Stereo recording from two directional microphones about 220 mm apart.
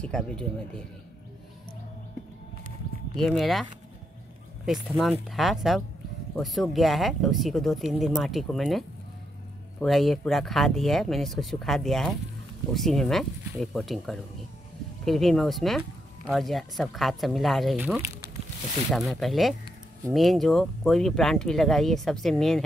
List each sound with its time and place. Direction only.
0.0 s speech: 5° left (ahead or behind)
3.2 s speech: centre (ahead or behind)
4.6 s speech: centre (ahead or behind)